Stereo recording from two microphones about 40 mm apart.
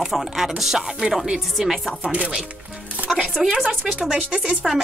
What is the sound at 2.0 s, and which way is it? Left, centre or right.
Speech, right.